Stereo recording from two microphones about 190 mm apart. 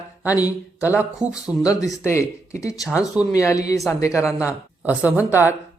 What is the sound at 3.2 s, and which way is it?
Speech, 15° left (ahead or behind).